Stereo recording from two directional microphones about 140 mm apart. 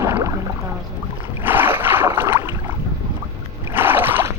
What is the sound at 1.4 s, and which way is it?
Boat, 15° right (ahead or behind).